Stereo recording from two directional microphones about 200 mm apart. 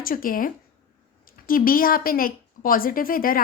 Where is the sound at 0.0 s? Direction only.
45° left (ahead or behind).